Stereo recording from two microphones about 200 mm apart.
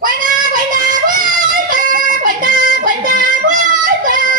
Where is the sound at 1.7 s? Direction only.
45° right (ahead or behind).